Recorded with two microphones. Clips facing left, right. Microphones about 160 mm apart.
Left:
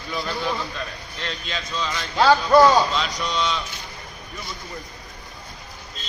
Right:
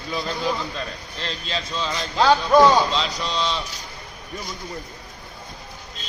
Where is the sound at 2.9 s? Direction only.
30° right (ahead or behind).